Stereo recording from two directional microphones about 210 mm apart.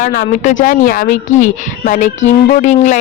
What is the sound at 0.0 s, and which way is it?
Speech, 35° left (ahead or behind).